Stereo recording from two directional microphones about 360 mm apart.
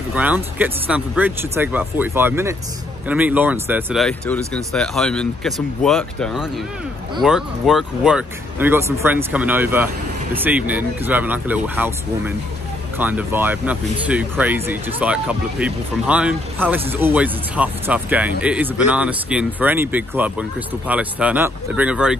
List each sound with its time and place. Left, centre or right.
0.1 s speech: centre